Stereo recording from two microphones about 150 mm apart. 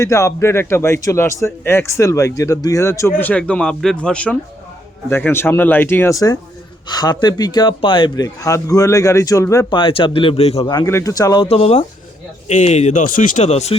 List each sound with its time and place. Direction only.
0.0 s a man's voice: 20° left (ahead or behind)
9.7 s speech: 35° left (ahead or behind)
10.7 s a man's voice: 20° left (ahead or behind)
11.4 s speech: 40° left (ahead or behind)